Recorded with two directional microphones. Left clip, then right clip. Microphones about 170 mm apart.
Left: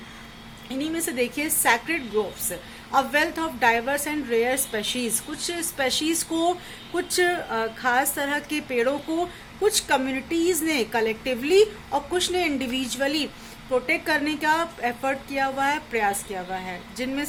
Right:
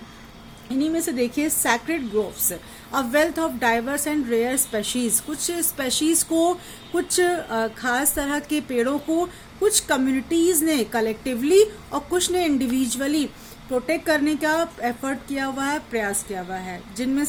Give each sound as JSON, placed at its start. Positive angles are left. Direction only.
{"t": 0.7, "sound": "a woman's voice", "side_deg": -55}